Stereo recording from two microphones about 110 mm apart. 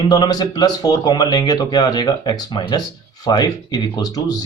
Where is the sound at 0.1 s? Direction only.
40° left (ahead or behind).